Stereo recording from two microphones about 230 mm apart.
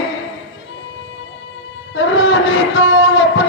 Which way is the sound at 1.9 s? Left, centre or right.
Left.